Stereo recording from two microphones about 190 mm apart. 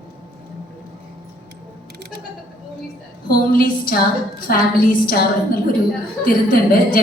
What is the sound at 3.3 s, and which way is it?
A woman's voice, 50° left (ahead or behind).